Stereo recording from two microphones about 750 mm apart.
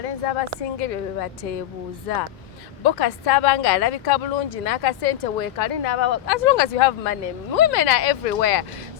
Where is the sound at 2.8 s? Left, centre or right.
Left.